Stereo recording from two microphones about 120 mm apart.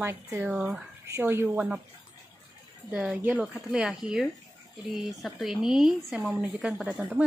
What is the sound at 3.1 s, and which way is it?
Speech, 15° right (ahead or behind).